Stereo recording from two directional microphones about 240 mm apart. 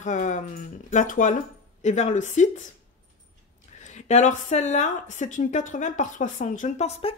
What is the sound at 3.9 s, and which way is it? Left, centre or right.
A woman's voice, left.